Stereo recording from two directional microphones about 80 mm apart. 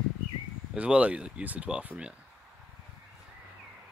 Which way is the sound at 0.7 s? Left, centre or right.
Centre.